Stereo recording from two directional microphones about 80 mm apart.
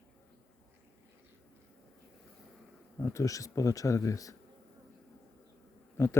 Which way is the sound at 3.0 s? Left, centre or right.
Left.